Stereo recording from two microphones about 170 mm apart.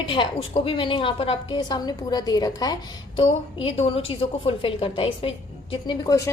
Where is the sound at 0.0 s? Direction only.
30° left (ahead or behind).